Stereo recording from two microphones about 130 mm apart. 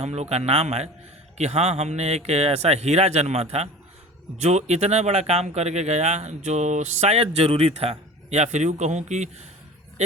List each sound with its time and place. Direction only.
0.0 s speech: 55° right (ahead or behind)